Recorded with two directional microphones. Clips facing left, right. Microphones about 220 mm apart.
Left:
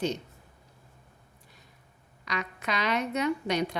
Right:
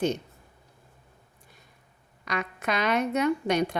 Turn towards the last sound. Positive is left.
turn(degrees=-50)  # may be behind; listen again after turning